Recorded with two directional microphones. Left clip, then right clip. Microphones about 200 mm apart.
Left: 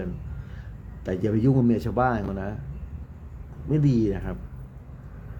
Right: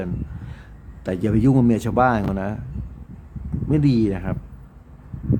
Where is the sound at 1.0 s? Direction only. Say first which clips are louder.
Right 4 dB; 15° right (ahead or behind).